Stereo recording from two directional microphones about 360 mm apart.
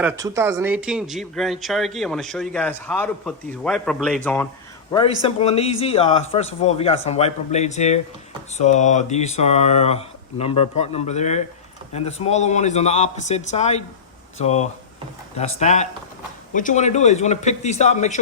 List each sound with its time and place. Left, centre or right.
0.0 s a man's voice: centre